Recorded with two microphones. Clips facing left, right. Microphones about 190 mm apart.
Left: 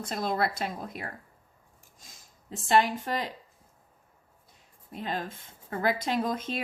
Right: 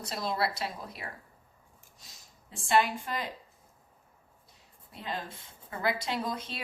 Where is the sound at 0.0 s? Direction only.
50° left (ahead or behind).